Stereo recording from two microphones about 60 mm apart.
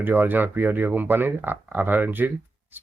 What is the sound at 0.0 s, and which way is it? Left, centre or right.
Speech, right.